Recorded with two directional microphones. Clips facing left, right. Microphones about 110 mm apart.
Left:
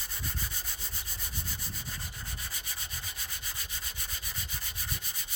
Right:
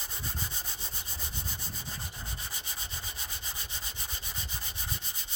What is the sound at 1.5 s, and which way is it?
Sanding, 25° right (ahead or behind).